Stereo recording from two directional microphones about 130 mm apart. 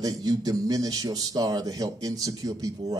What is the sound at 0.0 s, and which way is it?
A man's voice, 30° right (ahead or behind).